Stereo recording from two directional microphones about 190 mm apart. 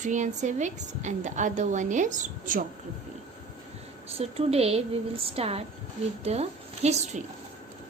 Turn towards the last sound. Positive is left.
turn(degrees=-35)  # may be behind; listen again after turning